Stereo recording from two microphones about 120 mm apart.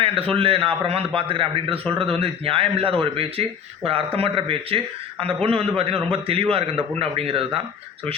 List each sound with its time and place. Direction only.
0.0 s a man's voice: 50° right (ahead or behind)